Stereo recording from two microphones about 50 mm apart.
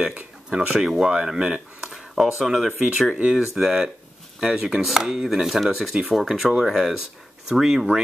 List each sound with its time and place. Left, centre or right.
0.1 s speech: centre
1.9 s speech: centre
3.2 s speech: right